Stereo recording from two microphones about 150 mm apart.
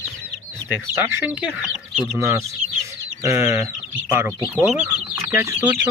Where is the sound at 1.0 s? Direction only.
10° right (ahead or behind).